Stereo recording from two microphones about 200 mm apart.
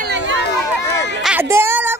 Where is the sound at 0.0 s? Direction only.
65° right (ahead or behind).